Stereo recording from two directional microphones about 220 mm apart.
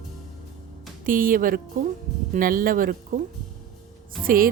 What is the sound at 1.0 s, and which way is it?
Speech, 40° right (ahead or behind).